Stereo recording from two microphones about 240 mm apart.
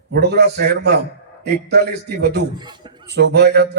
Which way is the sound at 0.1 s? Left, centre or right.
Right.